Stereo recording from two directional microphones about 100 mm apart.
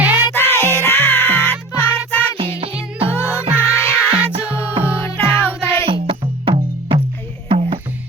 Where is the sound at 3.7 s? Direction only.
25° left (ahead or behind).